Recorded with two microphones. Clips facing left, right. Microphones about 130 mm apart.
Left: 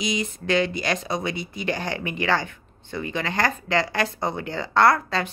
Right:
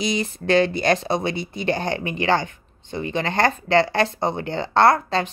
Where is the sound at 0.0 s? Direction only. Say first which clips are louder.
Right 3 dB; 35° right (ahead or behind).